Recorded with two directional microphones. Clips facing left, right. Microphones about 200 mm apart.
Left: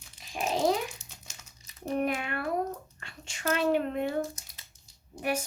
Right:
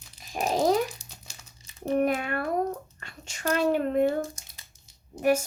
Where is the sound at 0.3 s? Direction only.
40° right (ahead or behind).